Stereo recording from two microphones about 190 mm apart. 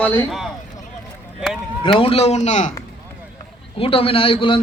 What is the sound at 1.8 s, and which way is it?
Speech, 30° left (ahead or behind).